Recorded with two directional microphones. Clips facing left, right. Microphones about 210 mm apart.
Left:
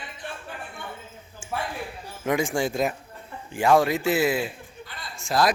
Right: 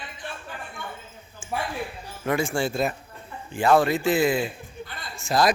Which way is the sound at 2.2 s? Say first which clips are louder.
Even; 15° left (ahead or behind).